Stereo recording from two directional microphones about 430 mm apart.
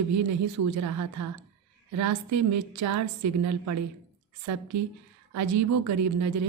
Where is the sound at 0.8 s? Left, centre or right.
Right.